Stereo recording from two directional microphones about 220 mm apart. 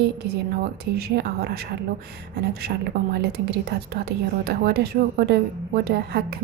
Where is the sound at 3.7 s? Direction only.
45° right (ahead or behind).